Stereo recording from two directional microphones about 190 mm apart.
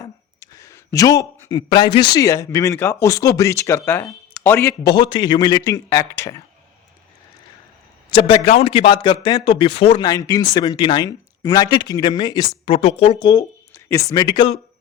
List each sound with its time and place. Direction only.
0.0 s speech: 15° left (ahead or behind)
8.1 s speech: 30° left (ahead or behind)
10.1 s speech: 20° left (ahead or behind)
13.7 s speech: 15° left (ahead or behind)